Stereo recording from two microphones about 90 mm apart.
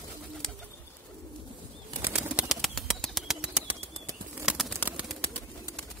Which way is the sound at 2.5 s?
Centre (ahead or behind).